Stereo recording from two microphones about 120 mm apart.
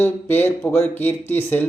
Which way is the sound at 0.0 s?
15° left (ahead or behind).